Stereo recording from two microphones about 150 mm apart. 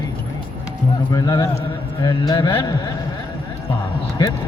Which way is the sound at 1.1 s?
25° left (ahead or behind).